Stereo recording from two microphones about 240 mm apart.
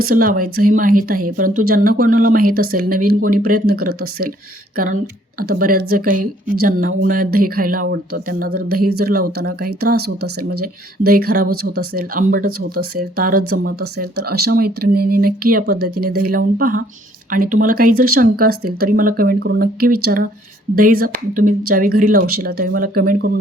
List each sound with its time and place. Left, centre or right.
0.0 s speech: right
5.4 s speech: right